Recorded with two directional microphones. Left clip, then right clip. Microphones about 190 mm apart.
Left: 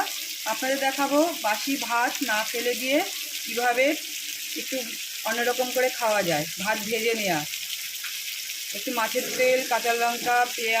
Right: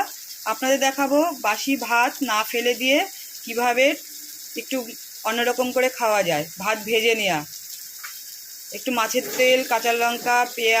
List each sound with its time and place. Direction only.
0.4 s frying: 30° right (ahead or behind)
5.2 s frying: 30° right (ahead or behind)
9.0 s frying: 30° right (ahead or behind)